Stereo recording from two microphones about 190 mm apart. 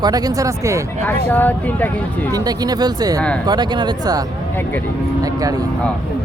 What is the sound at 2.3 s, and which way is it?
Speech, 20° right (ahead or behind).